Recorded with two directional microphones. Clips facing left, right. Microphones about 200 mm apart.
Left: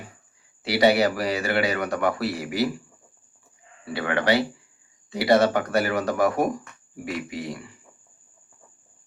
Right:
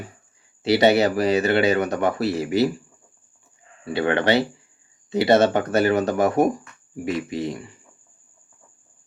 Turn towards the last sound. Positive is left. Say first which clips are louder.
# right 5 dB
turn(degrees=-25)  # may be behind; listen again after turning